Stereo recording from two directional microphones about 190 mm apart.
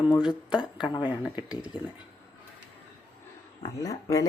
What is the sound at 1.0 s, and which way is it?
Speech, 10° right (ahead or behind).